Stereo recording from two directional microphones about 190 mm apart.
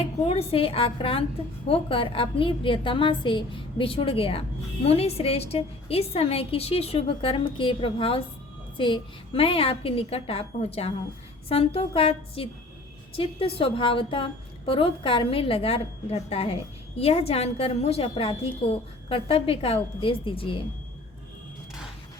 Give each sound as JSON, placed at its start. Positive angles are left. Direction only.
{"t": 0.3, "sound": "a woman's voice", "side_deg": 30}